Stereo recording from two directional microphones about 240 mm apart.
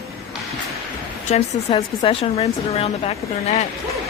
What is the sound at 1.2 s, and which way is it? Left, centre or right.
Speech, left.